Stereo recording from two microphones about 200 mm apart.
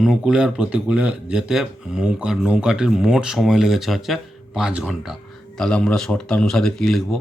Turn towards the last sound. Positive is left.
turn(degrees=0)  # may be behind; listen again after turning